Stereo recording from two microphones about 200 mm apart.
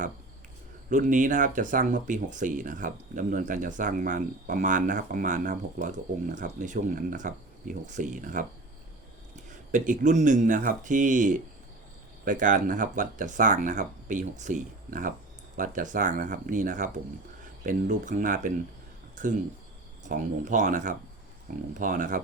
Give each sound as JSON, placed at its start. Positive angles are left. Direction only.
{"t": 0.9, "sound": "speech", "side_deg": -40}
{"t": 19.1, "sound": "a sound", "side_deg": -40}
{"t": 20.1, "sound": "speech", "side_deg": -40}